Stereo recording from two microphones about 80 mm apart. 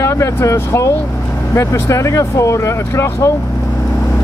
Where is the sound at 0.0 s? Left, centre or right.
Left.